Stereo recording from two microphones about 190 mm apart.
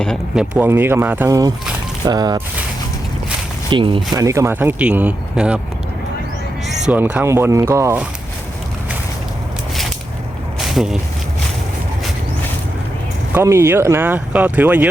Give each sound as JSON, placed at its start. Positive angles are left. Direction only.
{"t": 0.0, "sound": "speech", "side_deg": 0}
{"t": 3.7, "sound": "speech", "side_deg": -25}
{"t": 6.7, "sound": "speech", "side_deg": -5}
{"t": 10.6, "sound": "a sound", "side_deg": 0}
{"t": 13.3, "sound": "speech", "side_deg": -15}